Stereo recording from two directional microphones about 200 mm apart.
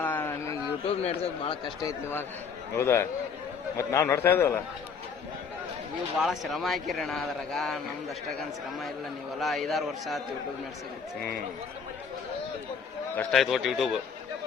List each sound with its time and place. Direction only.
0.0 s a sound: 10° left (ahead or behind)
0.9 s a man's voice: 30° left (ahead or behind); by 4.5 s 10° left (ahead or behind)
6.1 s speech: centre (ahead or behind)
9.4 s speech: centre (ahead or behind)
13.1 s speech: centre (ahead or behind)